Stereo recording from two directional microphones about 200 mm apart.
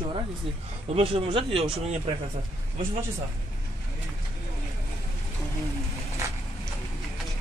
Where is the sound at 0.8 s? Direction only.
30° right (ahead or behind).